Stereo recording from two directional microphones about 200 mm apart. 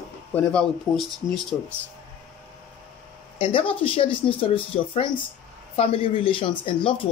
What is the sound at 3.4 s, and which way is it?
Speech, 25° left (ahead or behind).